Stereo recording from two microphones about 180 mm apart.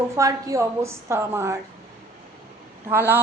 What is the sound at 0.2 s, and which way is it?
A woman's voice, 20° right (ahead or behind).